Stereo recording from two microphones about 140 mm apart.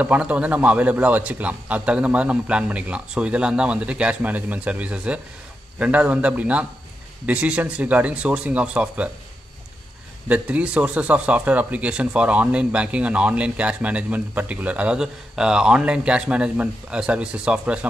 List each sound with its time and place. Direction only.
0.0 s speech: 10° right (ahead or behind)
10.2 s speech: 10° right (ahead or behind)